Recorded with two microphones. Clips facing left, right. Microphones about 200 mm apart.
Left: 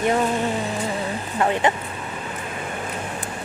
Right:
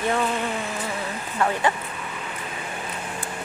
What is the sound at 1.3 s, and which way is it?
Speech, 25° left (ahead or behind).